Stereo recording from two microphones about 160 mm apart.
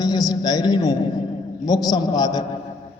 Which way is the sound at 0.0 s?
25° left (ahead or behind).